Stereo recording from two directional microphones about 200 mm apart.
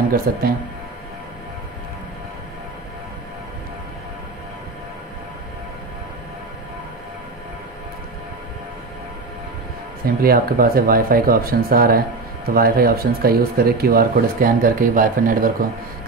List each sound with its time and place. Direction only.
0.3 s speech: 50° right (ahead or behind)
10.0 s speech: 45° right (ahead or behind)